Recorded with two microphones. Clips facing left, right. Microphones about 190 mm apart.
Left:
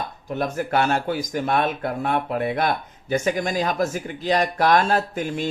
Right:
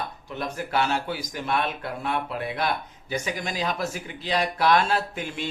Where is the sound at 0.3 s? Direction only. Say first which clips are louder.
Left 5 dB; 50° left (ahead or behind).